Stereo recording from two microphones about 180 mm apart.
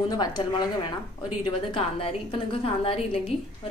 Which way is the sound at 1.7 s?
30° left (ahead or behind).